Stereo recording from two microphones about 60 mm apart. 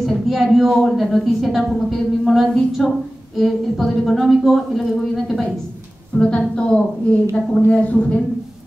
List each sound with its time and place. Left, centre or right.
0.0 s a sound: centre
0.8 s a woman's voice: centre
6.1 s a woman's voice: centre